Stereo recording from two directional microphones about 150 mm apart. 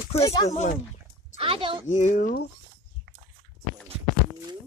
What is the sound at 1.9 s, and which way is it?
Speech, 55° left (ahead or behind).